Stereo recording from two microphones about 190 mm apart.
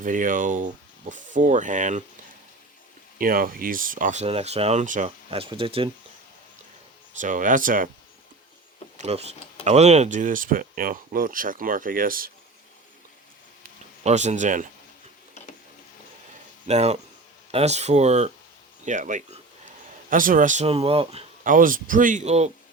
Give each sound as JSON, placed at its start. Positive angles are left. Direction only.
{"t": 0.0, "sound": "speech", "side_deg": -45}
{"t": 3.2, "sound": "speech", "side_deg": -50}
{"t": 7.2, "sound": "speech", "side_deg": -45}
{"t": 9.0, "sound": "speech", "side_deg": -35}
{"t": 14.0, "sound": "speech", "side_deg": -40}
{"t": 16.6, "sound": "speech", "side_deg": -35}
{"t": 21.4, "sound": "speech", "side_deg": -45}